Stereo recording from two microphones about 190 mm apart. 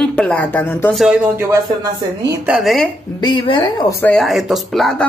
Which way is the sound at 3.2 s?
25° left (ahead or behind).